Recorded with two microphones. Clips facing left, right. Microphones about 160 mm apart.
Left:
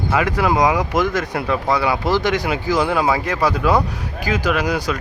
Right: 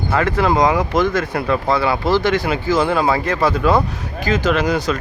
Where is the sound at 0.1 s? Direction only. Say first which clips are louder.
Right 2 dB; 10° left (ahead or behind).